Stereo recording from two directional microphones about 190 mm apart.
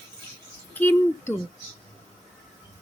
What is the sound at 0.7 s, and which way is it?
Speech, 10° left (ahead or behind).